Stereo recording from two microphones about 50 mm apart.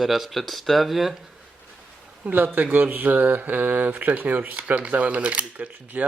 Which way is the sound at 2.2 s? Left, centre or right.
Right.